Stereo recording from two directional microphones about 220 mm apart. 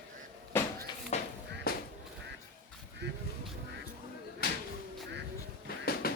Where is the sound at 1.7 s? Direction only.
45° left (ahead or behind).